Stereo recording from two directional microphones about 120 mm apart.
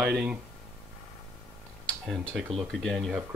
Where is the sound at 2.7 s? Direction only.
Centre (ahead or behind).